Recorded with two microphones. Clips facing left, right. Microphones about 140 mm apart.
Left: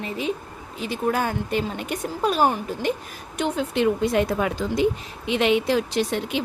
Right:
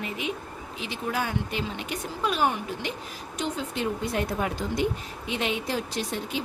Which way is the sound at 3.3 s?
65° left (ahead or behind).